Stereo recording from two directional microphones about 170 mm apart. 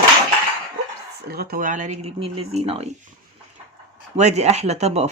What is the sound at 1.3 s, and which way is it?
Speech, 65° right (ahead or behind).